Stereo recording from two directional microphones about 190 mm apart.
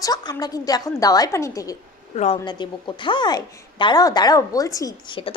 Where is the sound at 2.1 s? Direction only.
35° left (ahead or behind).